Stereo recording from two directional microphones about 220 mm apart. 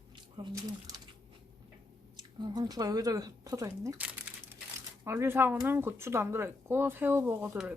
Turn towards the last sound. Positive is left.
turn(degrees=-5)  # may be behind; listen again after turning